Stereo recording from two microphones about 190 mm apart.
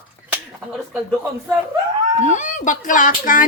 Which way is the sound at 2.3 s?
40° left (ahead or behind).